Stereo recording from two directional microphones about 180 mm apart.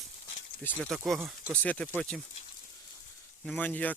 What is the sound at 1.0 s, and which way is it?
Speech, 5° right (ahead or behind).